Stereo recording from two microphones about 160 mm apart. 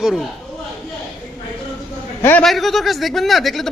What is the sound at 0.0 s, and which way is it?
Speech, 5° right (ahead or behind).